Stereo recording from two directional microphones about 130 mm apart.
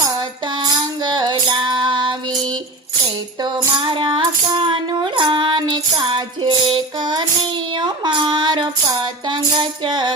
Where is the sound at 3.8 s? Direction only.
40° right (ahead or behind).